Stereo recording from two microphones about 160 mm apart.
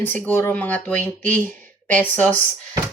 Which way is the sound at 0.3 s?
10° left (ahead or behind).